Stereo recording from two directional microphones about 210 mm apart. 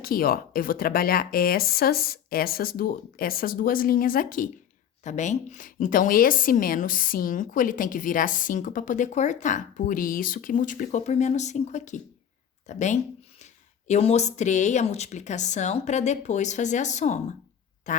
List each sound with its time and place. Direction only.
0.0 s a woman's voice: 45° left (ahead or behind)